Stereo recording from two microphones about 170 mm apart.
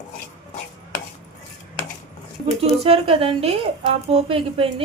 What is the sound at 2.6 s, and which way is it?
A woman's voice, 35° right (ahead or behind).